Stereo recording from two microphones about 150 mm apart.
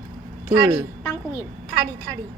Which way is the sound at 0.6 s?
25° right (ahead or behind).